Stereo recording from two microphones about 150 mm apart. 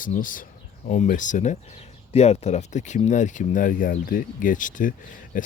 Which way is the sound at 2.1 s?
45° left (ahead or behind).